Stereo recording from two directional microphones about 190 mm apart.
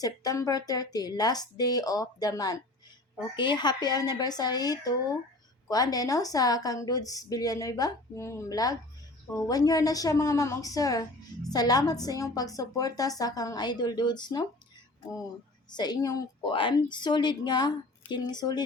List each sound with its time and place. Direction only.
0.0 s a woman's voice: 20° left (ahead or behind)
15.7 s a woman's voice: 20° left (ahead or behind)